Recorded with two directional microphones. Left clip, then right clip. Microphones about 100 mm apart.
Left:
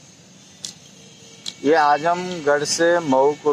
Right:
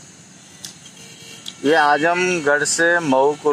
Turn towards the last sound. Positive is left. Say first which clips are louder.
# right 1 dB
turn(degrees=-30)  # may be behind; listen again after turning